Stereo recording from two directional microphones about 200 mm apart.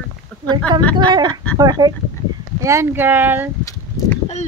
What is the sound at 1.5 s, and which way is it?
Speech, 20° right (ahead or behind).